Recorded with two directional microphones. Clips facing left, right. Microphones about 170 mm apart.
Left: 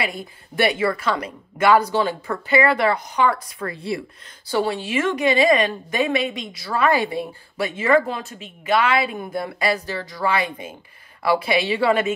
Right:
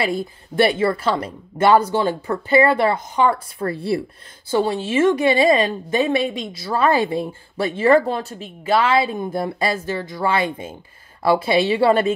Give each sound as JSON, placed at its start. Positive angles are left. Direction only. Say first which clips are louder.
{"t": 0.0, "sound": "a woman's voice", "louder": "right 5 dB", "side_deg": -30}